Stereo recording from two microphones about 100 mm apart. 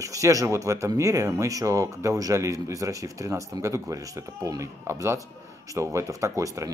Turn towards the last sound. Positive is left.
turn(degrees=-30)  # may be behind; listen again after turning